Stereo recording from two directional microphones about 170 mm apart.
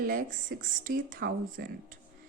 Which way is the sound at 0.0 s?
55° right (ahead or behind).